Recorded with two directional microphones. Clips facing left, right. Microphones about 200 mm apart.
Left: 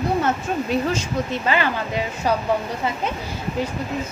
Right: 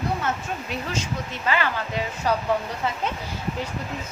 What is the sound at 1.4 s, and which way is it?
Speech, 20° left (ahead or behind).